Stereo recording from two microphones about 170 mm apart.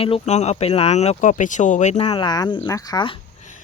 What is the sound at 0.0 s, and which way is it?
Speech, 40° left (ahead or behind).